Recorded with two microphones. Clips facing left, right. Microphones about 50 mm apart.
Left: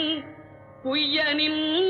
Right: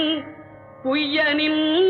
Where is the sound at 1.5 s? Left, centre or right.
Right.